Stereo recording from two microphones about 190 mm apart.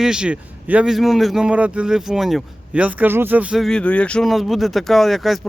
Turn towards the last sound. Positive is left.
turn(degrees=0)  # may be behind; listen again after turning